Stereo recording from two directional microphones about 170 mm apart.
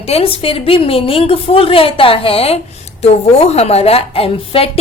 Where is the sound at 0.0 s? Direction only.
35° left (ahead or behind).